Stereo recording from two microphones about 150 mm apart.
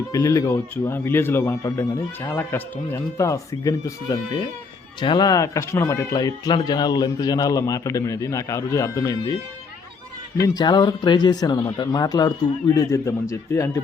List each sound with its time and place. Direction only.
0.1 s speech: 20° left (ahead or behind)
10.4 s a man's voice: 25° left (ahead or behind)